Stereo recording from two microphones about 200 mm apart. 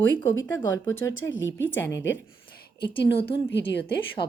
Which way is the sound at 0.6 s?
15° left (ahead or behind).